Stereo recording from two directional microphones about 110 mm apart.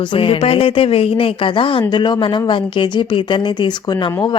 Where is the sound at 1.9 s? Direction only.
45° left (ahead or behind).